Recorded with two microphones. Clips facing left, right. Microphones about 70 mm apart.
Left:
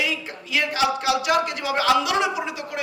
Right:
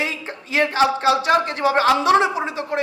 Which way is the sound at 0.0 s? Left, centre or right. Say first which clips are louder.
Right 1 dB; right.